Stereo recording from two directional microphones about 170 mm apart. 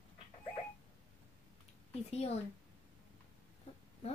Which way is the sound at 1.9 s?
40° left (ahead or behind).